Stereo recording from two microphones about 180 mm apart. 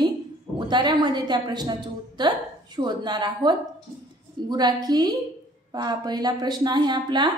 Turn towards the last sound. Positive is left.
turn(degrees=-25)  # may be behind; listen again after turning